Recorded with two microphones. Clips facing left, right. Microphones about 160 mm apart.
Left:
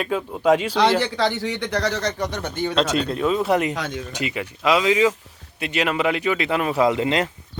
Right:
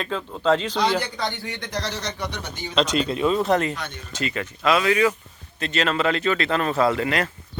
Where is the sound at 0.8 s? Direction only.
80° left.